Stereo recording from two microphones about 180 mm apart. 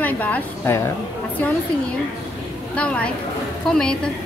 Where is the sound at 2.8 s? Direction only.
5° left (ahead or behind).